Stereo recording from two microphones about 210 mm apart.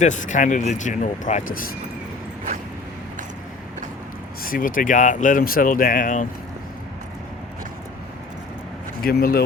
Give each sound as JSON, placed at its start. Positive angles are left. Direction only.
{"t": 0.0, "sound": "speech", "side_deg": 35}
{"t": 4.4, "sound": "speech", "side_deg": 40}
{"t": 9.0, "sound": "speech", "side_deg": 45}